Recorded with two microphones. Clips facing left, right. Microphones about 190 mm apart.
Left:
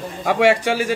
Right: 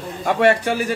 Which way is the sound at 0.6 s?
90° left.